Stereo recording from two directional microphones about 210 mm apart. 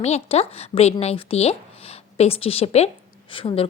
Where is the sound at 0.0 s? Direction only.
30° left (ahead or behind).